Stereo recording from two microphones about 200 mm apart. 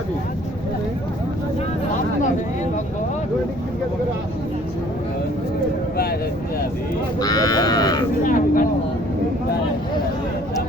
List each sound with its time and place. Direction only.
7.2 s sheep: 20° left (ahead or behind)
8.2 s vehicle: 40° left (ahead or behind)